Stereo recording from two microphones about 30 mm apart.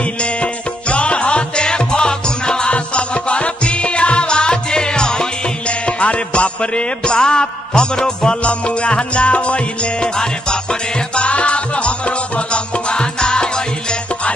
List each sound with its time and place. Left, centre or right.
0.2 s music: left
2.7 s music: left
5.7 s music: left
8.4 s music: left
10.0 s music: left
11.1 s music: left